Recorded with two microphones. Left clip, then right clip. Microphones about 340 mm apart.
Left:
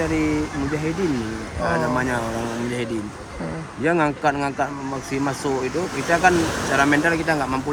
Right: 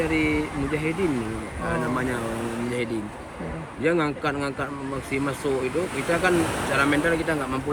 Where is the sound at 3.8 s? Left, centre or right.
Centre.